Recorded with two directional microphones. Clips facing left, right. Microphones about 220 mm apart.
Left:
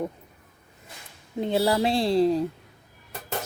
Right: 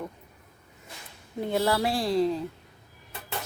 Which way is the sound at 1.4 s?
20° left (ahead or behind).